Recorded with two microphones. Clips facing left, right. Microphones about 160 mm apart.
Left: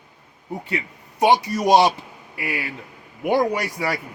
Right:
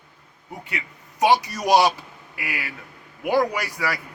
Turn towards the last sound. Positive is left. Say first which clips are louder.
# left 3 dB
turn(degrees=25)  # may be behind; listen again after turning